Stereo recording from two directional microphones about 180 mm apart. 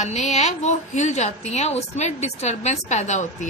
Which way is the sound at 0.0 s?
40° left (ahead or behind).